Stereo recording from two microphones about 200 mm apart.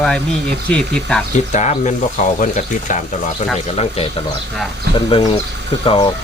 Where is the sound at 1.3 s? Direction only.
35° left (ahead or behind).